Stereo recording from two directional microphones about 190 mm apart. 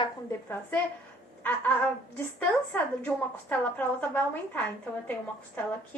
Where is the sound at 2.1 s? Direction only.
10° left (ahead or behind).